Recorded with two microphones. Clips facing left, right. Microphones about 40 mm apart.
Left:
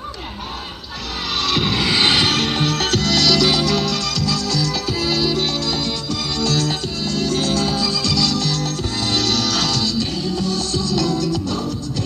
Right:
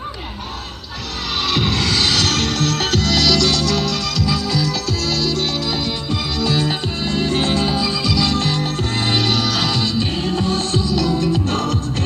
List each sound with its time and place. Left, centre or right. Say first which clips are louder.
1.4 s music: right 1 dB; centre
1.8 s vehicle: left 1 dB; centre
2.3 s music: even; centre
2.8 s music: right 1 dB; centre
4.3 s music: right 2 dB; centre
5.0 s music: left 2 dB; centre
6.4 s music: right 1 dB; centre
8.3 s music: right 2 dB; right
10.2 s music: right 2 dB; right
10.8 s music: right 1 dB; centre
11.1 s music: right 2 dB; right
11.4 s music: right 3 dB; right